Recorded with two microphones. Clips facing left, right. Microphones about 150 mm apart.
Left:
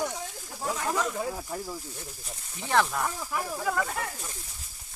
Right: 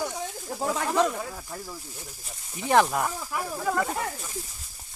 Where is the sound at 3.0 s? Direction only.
5° right (ahead or behind).